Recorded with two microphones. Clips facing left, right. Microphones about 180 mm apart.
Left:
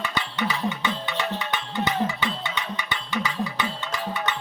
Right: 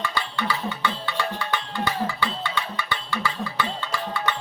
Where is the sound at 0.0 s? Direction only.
20° left (ahead or behind).